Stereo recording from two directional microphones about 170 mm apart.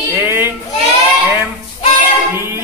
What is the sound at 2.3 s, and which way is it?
Speech, 15° right (ahead or behind).